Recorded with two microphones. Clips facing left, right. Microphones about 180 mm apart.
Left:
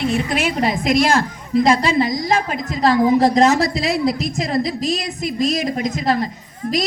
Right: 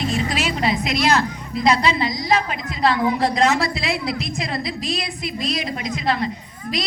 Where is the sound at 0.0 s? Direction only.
60° left (ahead or behind).